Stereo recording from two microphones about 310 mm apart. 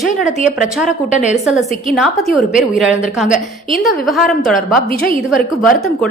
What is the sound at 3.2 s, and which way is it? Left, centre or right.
Speech, left.